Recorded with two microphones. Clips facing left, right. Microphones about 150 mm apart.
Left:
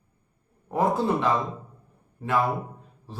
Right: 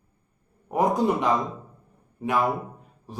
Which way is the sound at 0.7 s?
15° right (ahead or behind).